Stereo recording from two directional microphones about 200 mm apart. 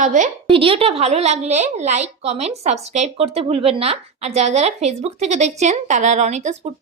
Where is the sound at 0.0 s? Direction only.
40° right (ahead or behind).